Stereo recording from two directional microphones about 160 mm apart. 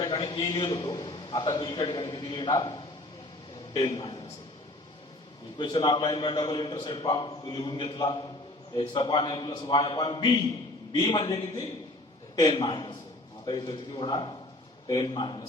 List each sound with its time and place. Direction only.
0.0 s a man's voice: 30° left (ahead or behind)
5.5 s a man's voice: 25° left (ahead or behind)